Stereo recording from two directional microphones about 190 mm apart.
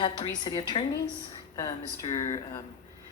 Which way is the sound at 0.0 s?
25° left (ahead or behind).